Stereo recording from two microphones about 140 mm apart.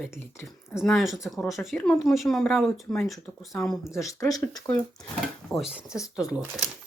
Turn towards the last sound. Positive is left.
turn(degrees=-10)  # may be behind; listen again after turning